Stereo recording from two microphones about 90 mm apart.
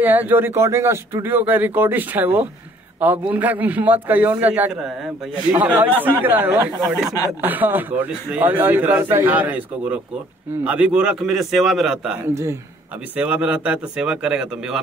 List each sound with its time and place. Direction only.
0.0 s a man's voice: 20° right (ahead or behind)